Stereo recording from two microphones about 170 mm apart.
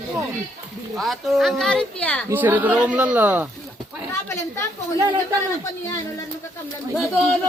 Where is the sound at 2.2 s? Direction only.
10° right (ahead or behind).